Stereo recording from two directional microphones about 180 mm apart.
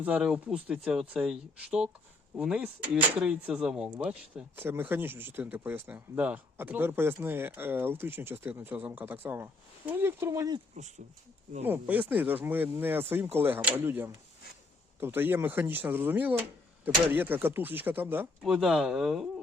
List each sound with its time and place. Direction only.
0.0 s speech: 5° right (ahead or behind)
10.8 s speech: 40° right (ahead or behind)
11.6 s speech: 10° right (ahead or behind)